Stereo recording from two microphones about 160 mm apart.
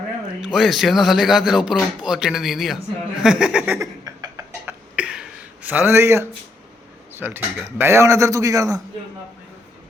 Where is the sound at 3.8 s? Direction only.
20° right (ahead or behind).